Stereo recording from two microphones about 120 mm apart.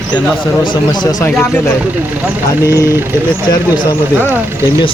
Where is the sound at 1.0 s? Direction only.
30° left (ahead or behind).